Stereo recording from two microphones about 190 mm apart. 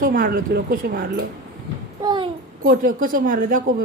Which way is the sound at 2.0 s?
25° right (ahead or behind).